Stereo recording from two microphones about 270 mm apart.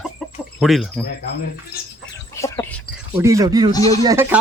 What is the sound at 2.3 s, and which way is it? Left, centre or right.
Chicken, centre.